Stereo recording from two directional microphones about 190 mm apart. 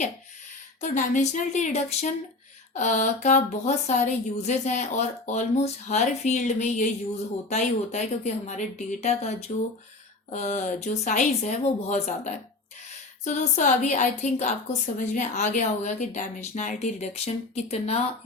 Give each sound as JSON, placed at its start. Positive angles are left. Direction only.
{"t": 0.8, "sound": "a woman's voice", "side_deg": 40}